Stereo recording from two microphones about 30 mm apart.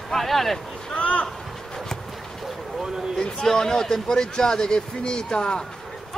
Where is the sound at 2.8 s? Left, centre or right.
Centre.